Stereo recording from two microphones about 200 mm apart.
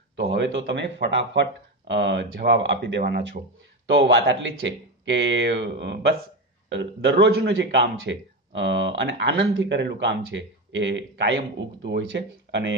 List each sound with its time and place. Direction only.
0.1 s a man's voice: 60° right (ahead or behind)